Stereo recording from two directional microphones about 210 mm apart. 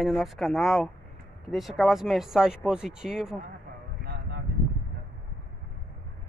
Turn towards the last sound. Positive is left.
turn(degrees=-50)  # may be behind; listen again after turning